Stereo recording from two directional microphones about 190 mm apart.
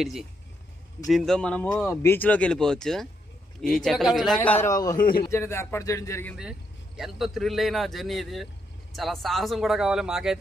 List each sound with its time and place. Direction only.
0.0 s speech: centre (ahead or behind); by 4.9 s 20° left (ahead or behind)
4.9 s a man's voice: 50° left (ahead or behind)
5.3 s speech: 15° left (ahead or behind)
7.0 s speech: centre (ahead or behind)